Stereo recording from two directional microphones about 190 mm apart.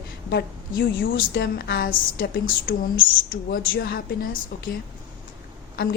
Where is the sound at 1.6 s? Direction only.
55° left (ahead or behind).